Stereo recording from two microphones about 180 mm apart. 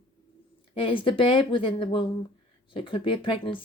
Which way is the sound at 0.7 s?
30° left (ahead or behind).